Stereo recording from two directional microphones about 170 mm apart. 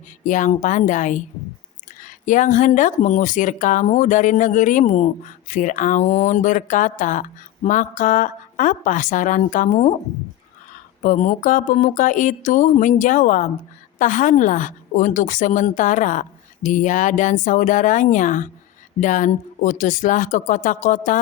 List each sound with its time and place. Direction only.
0.3 s speech: 50° left (ahead or behind)
11.0 s speech: 45° left (ahead or behind)